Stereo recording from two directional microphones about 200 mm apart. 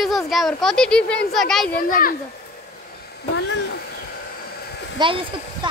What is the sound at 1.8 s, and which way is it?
Speech, 45° left (ahead or behind).